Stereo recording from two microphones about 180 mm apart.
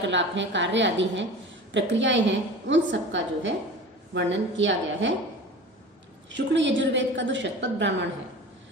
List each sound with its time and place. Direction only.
0.1 s a woman's voice: 90° right
6.3 s a woman's voice: 85° right